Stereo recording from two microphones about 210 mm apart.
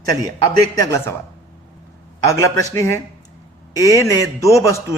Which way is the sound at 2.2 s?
15° left (ahead or behind).